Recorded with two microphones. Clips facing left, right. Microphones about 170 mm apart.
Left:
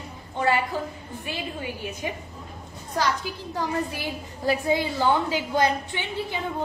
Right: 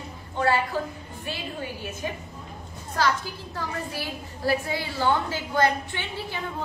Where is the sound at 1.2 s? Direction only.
15° left (ahead or behind).